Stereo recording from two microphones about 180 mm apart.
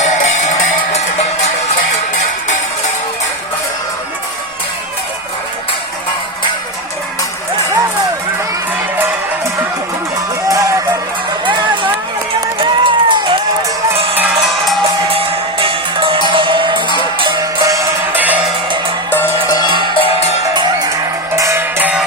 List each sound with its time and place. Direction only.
0.0 s music: 40° left (ahead or behind)
10.5 s music: 20° right (ahead or behind)
12.5 s music: 25° right (ahead or behind)
15.1 s music: 30° right (ahead or behind); by 18.3 s 10° right (ahead or behind)
19.5 s music: 25° left (ahead or behind)
21.3 s music: 15° right (ahead or behind)